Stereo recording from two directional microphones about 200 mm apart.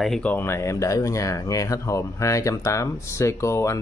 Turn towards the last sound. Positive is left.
turn(degrees=15)  # may be behind; listen again after turning